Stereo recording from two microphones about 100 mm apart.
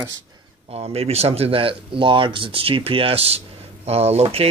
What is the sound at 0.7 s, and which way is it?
Speech, 90° right.